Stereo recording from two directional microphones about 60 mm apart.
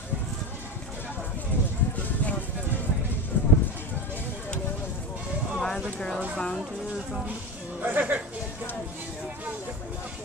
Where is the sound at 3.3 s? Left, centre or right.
Left.